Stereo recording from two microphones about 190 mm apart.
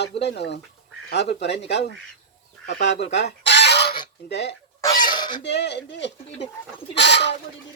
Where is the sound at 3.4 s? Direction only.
65° left (ahead or behind).